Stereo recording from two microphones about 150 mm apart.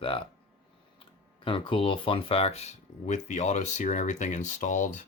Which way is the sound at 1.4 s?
35° left (ahead or behind).